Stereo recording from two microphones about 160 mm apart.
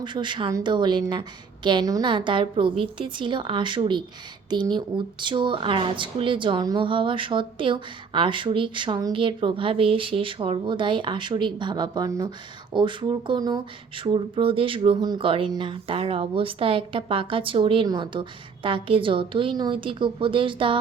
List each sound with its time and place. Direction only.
0.0 s speech: 30° right (ahead or behind)